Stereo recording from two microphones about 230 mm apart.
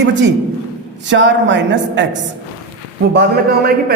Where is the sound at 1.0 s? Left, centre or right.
Right.